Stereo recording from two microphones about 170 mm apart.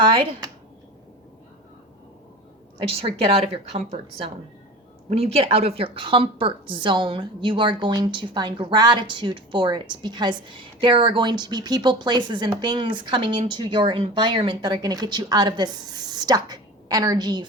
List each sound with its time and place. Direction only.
0.0 s speech: 30° right (ahead or behind)
2.8 s a woman's voice: 35° right (ahead or behind)